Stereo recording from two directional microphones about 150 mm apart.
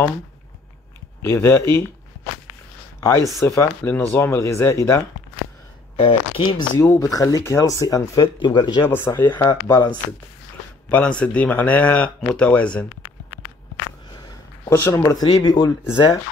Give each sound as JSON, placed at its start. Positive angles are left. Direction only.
{"t": 1.2, "sound": "speech", "side_deg": 15}
{"t": 3.0, "sound": "speech", "side_deg": 20}
{"t": 5.9, "sound": "speech", "side_deg": 35}
{"t": 6.8, "sound": "speech", "side_deg": 20}
{"t": 8.8, "sound": "speech", "side_deg": 15}
{"t": 10.9, "sound": "speech", "side_deg": 10}
{"t": 14.1, "sound": "a sound", "side_deg": 25}
{"t": 15.3, "sound": "speech", "side_deg": 25}